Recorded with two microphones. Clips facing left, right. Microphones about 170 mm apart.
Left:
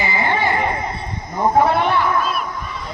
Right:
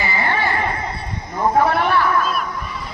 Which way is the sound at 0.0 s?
15° left (ahead or behind).